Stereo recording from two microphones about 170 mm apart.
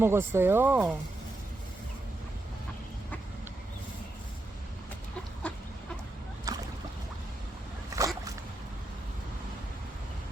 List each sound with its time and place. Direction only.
0.0 s speech: 15° right (ahead or behind)
6.5 s boat: 20° right (ahead or behind)
7.9 s a sound: 20° right (ahead or behind)